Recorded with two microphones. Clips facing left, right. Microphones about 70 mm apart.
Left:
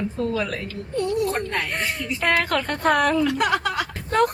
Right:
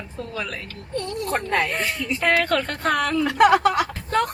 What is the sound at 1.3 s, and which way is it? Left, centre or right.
Speech, right.